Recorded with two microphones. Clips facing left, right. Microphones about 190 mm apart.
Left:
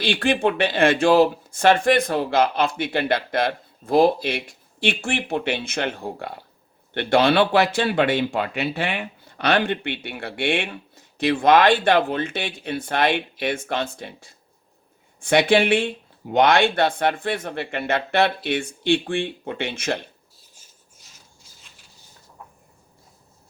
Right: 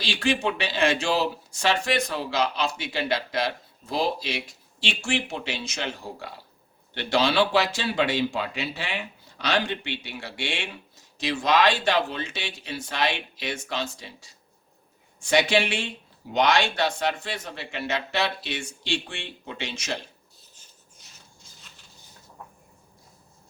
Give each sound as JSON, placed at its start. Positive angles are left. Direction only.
{"t": 0.0, "sound": "speech", "side_deg": 55}